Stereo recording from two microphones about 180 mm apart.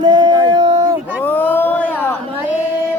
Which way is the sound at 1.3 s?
10° left (ahead or behind).